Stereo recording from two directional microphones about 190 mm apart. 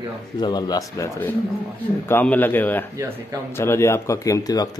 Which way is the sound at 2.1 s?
10° left (ahead or behind).